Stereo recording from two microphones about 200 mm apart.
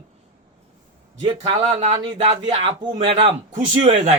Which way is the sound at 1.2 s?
30° right (ahead or behind).